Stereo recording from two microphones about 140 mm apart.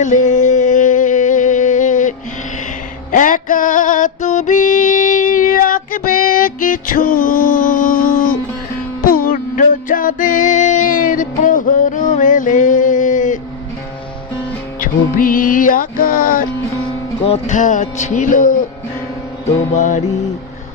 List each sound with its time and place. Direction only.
0.0 s a sound: 60° left (ahead or behind)
3.1 s music: 70° left (ahead or behind)
9.0 s music: 90° left; by 13.4 s 65° left (ahead or behind)
14.8 s music: 80° left
17.2 s speech: 50° left (ahead or behind); by 18.5 s 70° left (ahead or behind)
19.7 s speech: 60° left (ahead or behind)